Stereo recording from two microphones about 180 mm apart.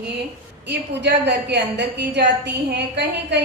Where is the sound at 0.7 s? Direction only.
70° right (ahead or behind).